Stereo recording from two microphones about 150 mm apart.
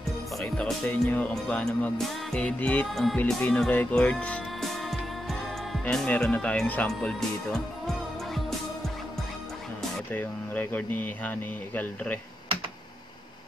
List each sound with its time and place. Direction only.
0.4 s speech: 5° left (ahead or behind)
9.8 s speech: 10° left (ahead or behind)